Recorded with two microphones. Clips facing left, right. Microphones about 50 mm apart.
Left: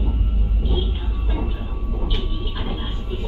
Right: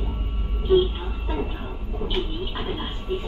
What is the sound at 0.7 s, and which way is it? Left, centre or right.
Music, right.